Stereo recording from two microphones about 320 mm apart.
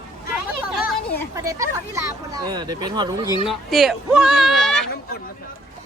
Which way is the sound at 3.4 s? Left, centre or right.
Centre.